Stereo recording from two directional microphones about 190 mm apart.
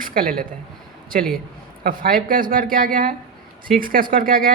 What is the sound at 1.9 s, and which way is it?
Speech, 50° right (ahead or behind).